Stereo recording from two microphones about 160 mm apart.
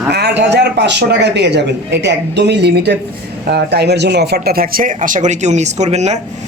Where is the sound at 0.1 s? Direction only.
90° right.